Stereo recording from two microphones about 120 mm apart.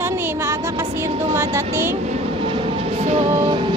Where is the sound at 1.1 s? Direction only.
55° right (ahead or behind).